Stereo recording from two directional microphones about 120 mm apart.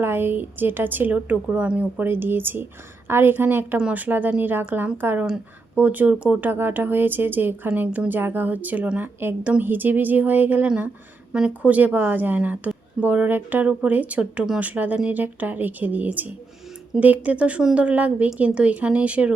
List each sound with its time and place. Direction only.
0.0 s speech: 20° right (ahead or behind)